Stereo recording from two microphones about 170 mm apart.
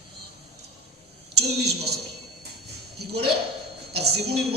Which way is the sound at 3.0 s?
70° right (ahead or behind).